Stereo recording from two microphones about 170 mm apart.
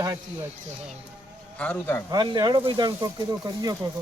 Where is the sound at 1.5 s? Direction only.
5° left (ahead or behind).